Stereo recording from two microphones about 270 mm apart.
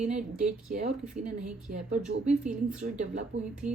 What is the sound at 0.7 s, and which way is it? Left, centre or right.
Speech, right.